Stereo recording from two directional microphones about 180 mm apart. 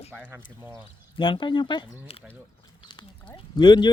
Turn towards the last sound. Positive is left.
turn(degrees=25)  # may be behind; listen again after turning